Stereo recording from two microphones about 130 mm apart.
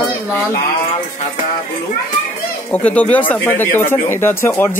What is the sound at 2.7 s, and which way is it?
Speech, 10° left (ahead or behind).